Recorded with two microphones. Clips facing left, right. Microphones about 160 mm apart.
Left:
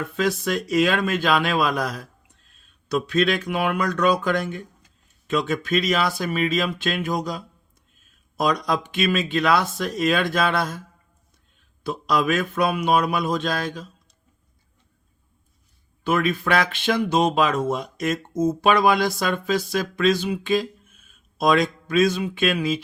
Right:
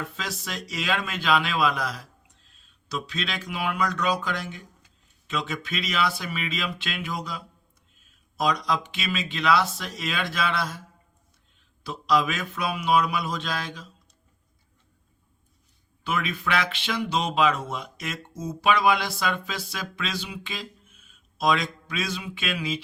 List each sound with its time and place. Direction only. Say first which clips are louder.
0.0 s speech: left 11 dB; 55° left (ahead or behind)
16.0 s speech: left 7 dB; 50° left (ahead or behind)